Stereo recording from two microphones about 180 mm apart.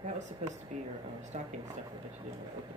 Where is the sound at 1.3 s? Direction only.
40° right (ahead or behind).